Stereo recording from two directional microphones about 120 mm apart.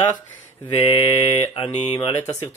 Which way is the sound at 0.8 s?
40° left (ahead or behind).